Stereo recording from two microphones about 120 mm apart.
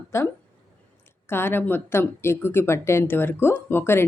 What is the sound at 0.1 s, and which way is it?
Speech, 25° left (ahead or behind).